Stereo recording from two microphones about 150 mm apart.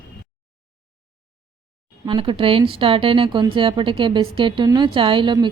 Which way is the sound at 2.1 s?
35° right (ahead or behind).